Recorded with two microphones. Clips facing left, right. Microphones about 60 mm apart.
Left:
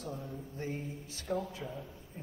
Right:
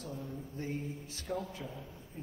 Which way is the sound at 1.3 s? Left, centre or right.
Left.